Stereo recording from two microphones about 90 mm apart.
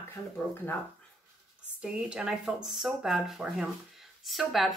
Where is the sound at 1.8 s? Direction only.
10° right (ahead or behind).